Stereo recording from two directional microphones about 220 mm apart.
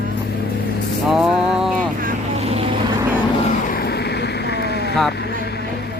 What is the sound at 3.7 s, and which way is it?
Vehicle, 45° left (ahead or behind).